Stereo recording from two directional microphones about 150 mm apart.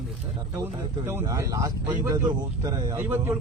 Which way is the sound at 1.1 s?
20° right (ahead or behind).